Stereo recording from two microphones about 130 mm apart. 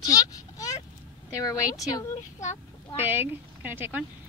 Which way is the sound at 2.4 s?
65° left (ahead or behind).